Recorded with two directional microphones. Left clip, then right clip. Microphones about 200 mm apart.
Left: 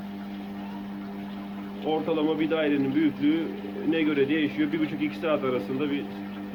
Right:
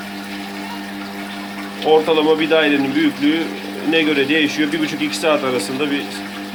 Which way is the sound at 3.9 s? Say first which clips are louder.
Right 10 dB; 50° right (ahead or behind).